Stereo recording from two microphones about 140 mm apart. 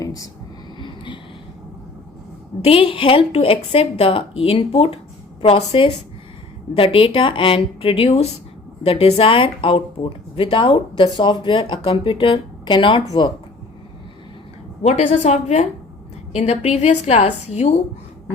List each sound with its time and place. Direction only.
0.0 s a sound: 25° left (ahead or behind)
0.8 s vehicle: 35° left (ahead or behind)
2.6 s speech: 40° left (ahead or behind)
14.8 s a woman's voice: 55° left (ahead or behind)